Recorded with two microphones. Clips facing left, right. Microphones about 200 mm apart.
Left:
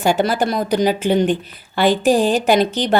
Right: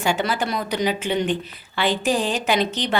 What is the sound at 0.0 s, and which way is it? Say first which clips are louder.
A woman's voice: left 6 dB; 40° left (ahead or behind).